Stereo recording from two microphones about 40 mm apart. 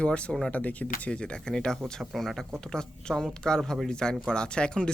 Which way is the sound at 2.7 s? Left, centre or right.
Centre.